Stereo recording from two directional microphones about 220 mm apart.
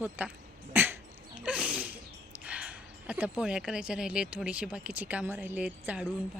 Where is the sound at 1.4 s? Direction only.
5° right (ahead or behind).